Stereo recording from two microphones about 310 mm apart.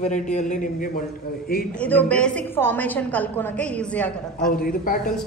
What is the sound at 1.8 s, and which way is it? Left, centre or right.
A woman's voice, centre.